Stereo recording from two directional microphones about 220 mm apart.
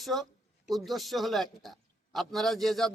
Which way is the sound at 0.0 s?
Centre (ahead or behind).